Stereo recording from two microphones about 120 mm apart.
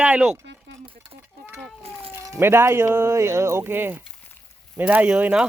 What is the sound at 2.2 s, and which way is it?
Speech, 25° right (ahead or behind).